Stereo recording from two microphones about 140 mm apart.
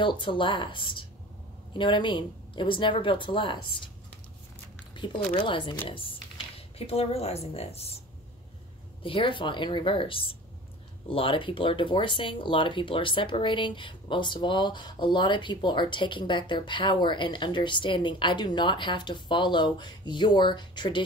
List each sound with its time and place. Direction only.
0.0 s speech: 35° left (ahead or behind)
5.3 s a woman's voice: 35° left (ahead or behind)
9.0 s speech: 35° left (ahead or behind)